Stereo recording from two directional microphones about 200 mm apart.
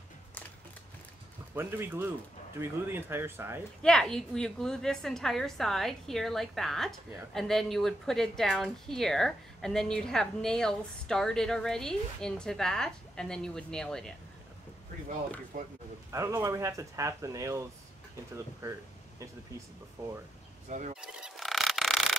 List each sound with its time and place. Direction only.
1.5 s speech: 10° right (ahead or behind)
3.8 s speech: 5° left (ahead or behind)
15.5 s speech: 45° right (ahead or behind)
16.1 s speech: 15° right (ahead or behind)
18.6 s a sound: 15° right (ahead or behind)
20.7 s speech: 40° right (ahead or behind)
21.0 s a sound: 5° right (ahead or behind)